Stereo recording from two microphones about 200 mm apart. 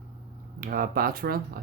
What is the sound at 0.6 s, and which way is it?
Speech, 45° right (ahead or behind).